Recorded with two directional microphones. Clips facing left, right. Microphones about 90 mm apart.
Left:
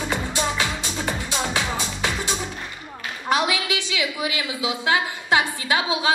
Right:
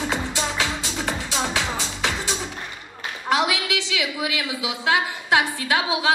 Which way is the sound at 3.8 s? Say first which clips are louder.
Even; 25° left (ahead or behind).